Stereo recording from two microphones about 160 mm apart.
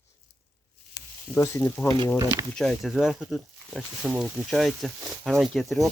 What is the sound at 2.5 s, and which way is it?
Speech, centre (ahead or behind).